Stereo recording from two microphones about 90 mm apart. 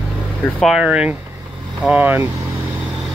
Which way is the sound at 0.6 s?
5° right (ahead or behind).